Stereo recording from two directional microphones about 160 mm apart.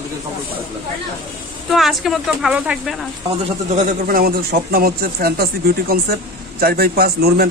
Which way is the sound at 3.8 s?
60° right (ahead or behind).